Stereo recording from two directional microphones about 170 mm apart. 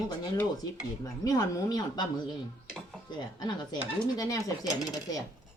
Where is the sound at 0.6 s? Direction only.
20° left (ahead or behind).